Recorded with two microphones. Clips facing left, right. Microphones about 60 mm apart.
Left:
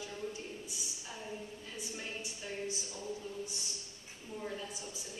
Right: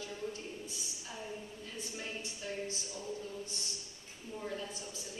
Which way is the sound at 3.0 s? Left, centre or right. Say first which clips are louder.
Left 1 dB; centre.